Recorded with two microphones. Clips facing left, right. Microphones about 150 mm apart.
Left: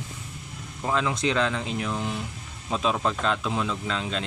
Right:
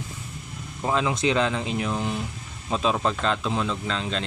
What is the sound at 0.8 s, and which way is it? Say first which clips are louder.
Speech: right 2 dB; 15° right (ahead or behind).